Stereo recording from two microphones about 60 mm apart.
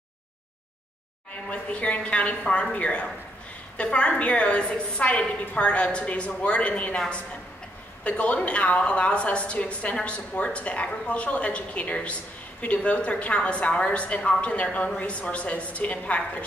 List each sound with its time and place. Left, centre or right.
1.5 s a woman's voice: left
8.0 s a woman's voice: left